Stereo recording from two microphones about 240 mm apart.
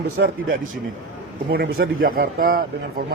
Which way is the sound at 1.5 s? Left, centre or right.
Right.